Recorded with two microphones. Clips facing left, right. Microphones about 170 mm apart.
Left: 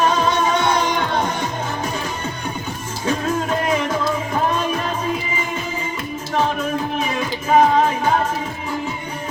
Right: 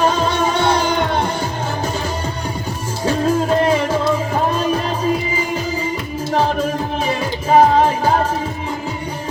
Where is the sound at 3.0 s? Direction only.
30° right (ahead or behind).